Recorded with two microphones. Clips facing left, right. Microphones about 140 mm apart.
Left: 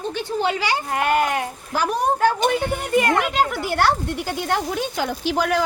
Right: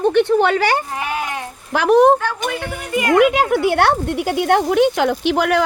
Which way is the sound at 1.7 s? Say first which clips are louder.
Right 10 dB; 70° right (ahead or behind).